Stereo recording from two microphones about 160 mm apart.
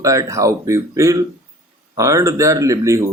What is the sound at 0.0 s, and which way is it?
Speech, 20° right (ahead or behind).